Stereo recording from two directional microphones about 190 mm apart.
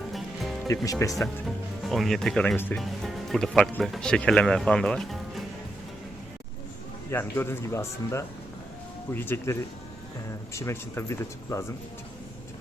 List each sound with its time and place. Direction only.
0.1 s music: centre (ahead or behind)
0.9 s speech: 15° left (ahead or behind)
1.5 s speech: centre (ahead or behind)
7.1 s speech: 10° left (ahead or behind)